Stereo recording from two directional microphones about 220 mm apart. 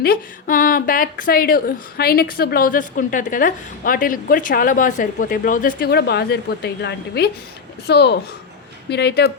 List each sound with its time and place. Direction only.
0.0 s a woman's voice: 40° left (ahead or behind)